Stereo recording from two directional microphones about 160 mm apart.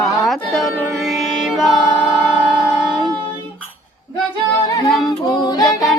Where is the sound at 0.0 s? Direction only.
Centre (ahead or behind).